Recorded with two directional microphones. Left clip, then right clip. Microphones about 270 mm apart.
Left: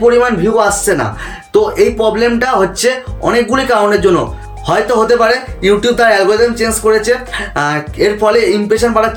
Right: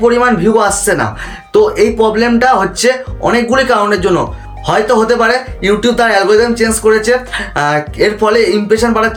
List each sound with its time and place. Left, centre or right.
0.0 s speech: centre